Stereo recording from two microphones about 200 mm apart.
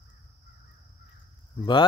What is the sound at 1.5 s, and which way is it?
Speech, 25° left (ahead or behind).